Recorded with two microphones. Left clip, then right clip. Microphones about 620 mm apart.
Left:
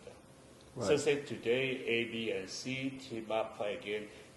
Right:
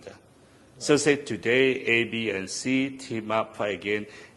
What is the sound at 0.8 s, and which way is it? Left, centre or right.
A man's voice, right.